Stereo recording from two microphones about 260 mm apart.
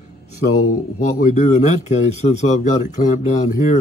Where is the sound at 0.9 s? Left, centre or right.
Left.